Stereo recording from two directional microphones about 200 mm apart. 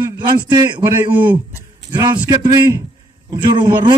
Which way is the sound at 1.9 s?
20° right (ahead or behind).